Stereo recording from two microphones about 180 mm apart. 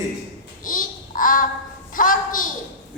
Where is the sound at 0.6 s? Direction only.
50° left (ahead or behind).